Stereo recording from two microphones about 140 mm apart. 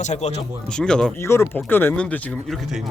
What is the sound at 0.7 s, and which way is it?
Speech, 5° left (ahead or behind).